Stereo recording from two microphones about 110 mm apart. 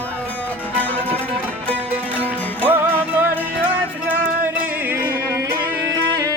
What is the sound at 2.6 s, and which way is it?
Music, 15° right (ahead or behind).